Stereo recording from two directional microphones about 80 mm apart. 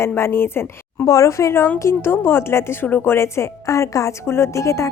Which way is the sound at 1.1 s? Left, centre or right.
Left.